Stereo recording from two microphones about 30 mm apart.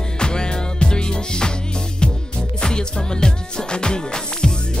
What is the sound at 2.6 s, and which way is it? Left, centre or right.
Music, left.